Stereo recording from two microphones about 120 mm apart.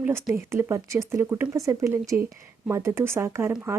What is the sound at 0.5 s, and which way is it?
A woman's voice, 25° right (ahead or behind).